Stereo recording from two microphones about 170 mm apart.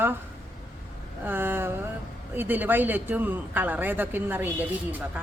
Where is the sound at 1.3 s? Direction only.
10° right (ahead or behind).